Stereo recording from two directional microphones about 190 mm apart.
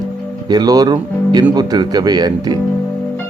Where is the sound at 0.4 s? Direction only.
20° right (ahead or behind).